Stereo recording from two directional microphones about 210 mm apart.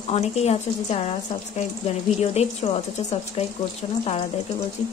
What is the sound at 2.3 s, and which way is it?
Speech, 30° left (ahead or behind).